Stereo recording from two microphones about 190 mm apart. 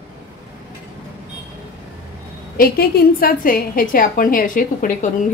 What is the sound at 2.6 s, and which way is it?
A woman's voice, 50° left (ahead or behind).